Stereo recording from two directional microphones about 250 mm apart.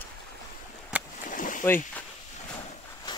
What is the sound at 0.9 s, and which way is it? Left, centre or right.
Boat, centre.